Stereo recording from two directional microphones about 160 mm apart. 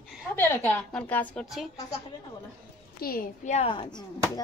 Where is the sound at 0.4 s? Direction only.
10° left (ahead or behind).